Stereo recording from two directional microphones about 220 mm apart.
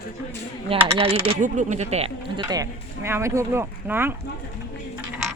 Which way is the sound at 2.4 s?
15° right (ahead or behind).